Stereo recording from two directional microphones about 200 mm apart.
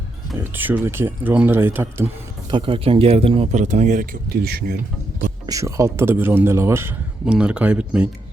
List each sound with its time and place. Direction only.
0.3 s a man's voice: 10° right (ahead or behind)
2.5 s speech: 25° right (ahead or behind); by 4.8 s 50° right (ahead or behind)
5.5 s a man's voice: 15° right (ahead or behind)